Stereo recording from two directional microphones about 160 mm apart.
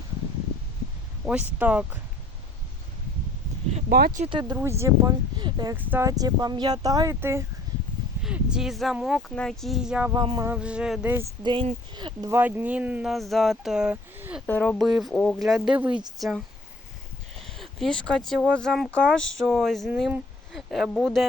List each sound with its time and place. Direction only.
1.2 s speech: 10° right (ahead or behind)
3.8 s speech: 75° right (ahead or behind)
4.3 s speech: 30° right (ahead or behind)
4.5 s speech: 15° right (ahead or behind)
5.7 s speech: 10° right (ahead or behind)
6.1 s speech: 25° right (ahead or behind)
8.2 s speech: 5° right (ahead or behind)
10.1 s speech: 25° right (ahead or behind)
10.4 s speech: 10° right (ahead or behind)
11.4 s speech: 30° right (ahead or behind)
12.3 s speech: 10° right (ahead or behind)
14.4 s speech: 10° left (ahead or behind); by 16.0 s 10° right (ahead or behind)
17.3 s a sound: centre (ahead or behind)
18.4 s speech: 5° left (ahead or behind)